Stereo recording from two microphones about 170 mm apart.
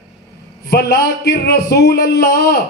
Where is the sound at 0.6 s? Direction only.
70° left (ahead or behind).